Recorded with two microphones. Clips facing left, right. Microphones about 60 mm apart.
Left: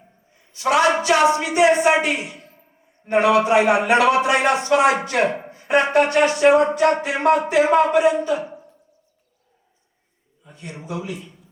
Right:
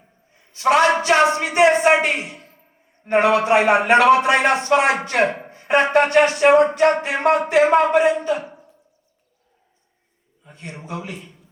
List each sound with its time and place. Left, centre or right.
0.5 s a man's voice: right
10.4 s a man's voice: right